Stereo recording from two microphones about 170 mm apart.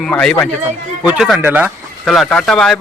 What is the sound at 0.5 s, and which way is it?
Speech, 10° right (ahead or behind).